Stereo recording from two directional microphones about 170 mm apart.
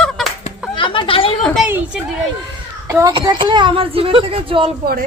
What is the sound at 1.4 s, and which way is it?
Speech, centre (ahead or behind).